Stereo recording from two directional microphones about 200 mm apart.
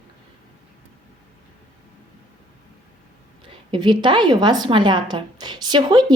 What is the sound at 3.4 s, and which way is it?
A woman's voice, 25° right (ahead or behind).